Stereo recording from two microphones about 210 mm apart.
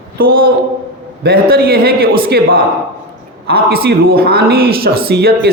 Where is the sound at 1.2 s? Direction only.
45° right (ahead or behind).